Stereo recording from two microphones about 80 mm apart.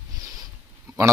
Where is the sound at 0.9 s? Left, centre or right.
Right.